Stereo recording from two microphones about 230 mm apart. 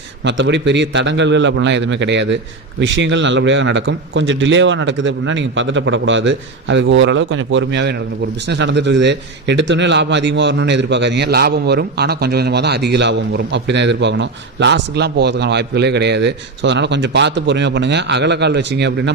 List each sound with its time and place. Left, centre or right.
0.3 s speech: right